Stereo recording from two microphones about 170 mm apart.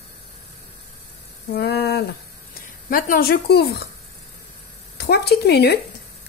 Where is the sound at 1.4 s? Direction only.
70° left (ahead or behind).